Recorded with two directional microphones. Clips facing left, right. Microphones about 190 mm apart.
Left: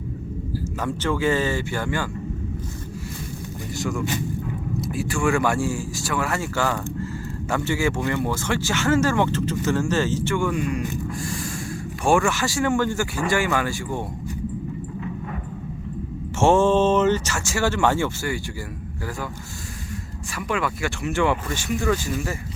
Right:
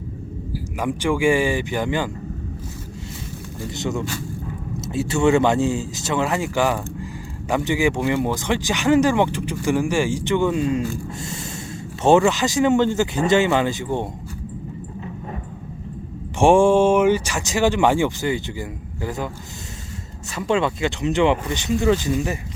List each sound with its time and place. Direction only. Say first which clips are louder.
0.8 s speech: right 4 dB; 15° right (ahead or behind)
3.8 s speech: even; 20° right (ahead or behind)
12.0 s speech: right 5 dB; 20° right (ahead or behind)
16.4 s speech: right 3 dB; 15° right (ahead or behind)
20.3 s speech: right 5 dB; 25° right (ahead or behind)